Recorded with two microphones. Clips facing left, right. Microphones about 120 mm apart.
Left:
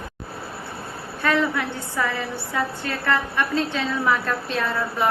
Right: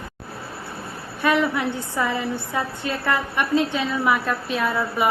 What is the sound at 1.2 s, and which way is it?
A woman's voice, 15° right (ahead or behind).